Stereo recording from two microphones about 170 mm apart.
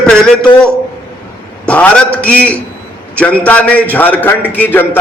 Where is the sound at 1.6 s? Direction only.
10° left (ahead or behind).